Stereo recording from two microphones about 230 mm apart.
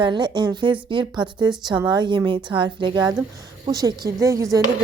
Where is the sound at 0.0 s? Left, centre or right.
Centre.